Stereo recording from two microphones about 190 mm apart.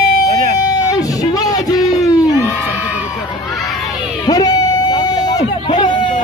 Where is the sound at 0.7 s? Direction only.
20° left (ahead or behind).